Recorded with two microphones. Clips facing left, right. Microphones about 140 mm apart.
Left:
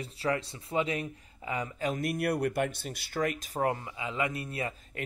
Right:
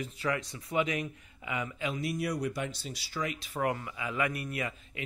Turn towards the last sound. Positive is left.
turn(degrees=30)  # may be behind; listen again after turning